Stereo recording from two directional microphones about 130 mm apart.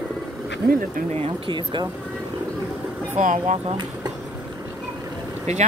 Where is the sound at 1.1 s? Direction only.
50° right (ahead or behind).